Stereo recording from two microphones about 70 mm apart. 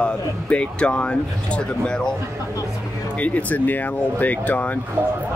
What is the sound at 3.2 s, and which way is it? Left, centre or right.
Speech, left.